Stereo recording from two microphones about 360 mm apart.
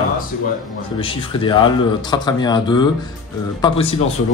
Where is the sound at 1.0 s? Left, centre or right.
Centre.